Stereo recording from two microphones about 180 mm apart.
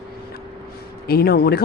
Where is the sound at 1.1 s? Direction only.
60° left (ahead or behind).